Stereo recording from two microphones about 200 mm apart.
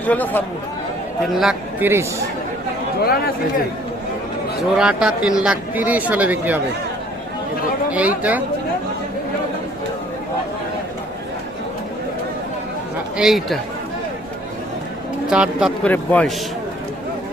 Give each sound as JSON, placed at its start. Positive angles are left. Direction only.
{"t": 0.0, "sound": "speech", "side_deg": 10}
{"t": 1.3, "sound": "speech", "side_deg": 0}
{"t": 3.0, "sound": "speech", "side_deg": 50}
{"t": 4.8, "sound": "speech", "side_deg": -5}
{"t": 7.9, "sound": "speech", "side_deg": -5}
{"t": 13.1, "sound": "speech", "side_deg": 0}
{"t": 15.3, "sound": "speech", "side_deg": -5}